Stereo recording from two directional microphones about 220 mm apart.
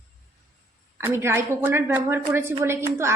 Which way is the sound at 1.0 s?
10° right (ahead or behind).